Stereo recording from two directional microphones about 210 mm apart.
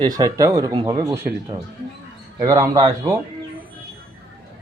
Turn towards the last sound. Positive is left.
turn(degrees=-20)  # may be behind; listen again after turning